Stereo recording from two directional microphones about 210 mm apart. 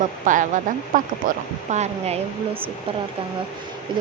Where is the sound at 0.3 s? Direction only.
35° right (ahead or behind).